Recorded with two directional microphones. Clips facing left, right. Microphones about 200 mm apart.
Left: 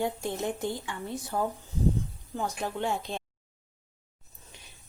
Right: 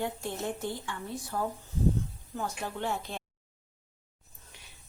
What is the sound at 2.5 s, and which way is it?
Speech, 20° left (ahead or behind).